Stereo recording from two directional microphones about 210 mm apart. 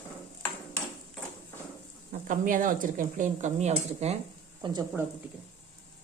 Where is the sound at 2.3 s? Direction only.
40° right (ahead or behind).